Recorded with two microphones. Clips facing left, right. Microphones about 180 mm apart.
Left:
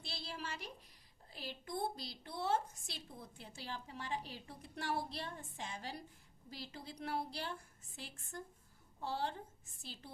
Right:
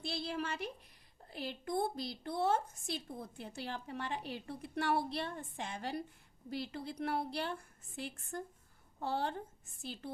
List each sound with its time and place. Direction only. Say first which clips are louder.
0.0 s a woman's voice: right 8 dB; 55° right (ahead or behind)